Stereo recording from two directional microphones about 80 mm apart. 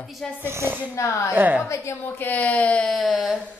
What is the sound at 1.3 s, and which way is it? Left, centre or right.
Speech, right.